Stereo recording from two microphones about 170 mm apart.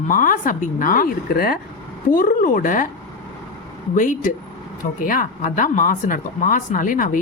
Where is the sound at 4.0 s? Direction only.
50° left (ahead or behind).